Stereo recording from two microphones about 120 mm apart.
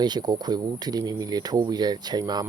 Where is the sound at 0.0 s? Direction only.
35° right (ahead or behind).